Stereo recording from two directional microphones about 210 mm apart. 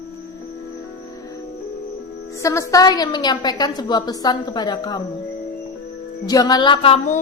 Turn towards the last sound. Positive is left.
turn(degrees=25)  # may be behind; listen again after turning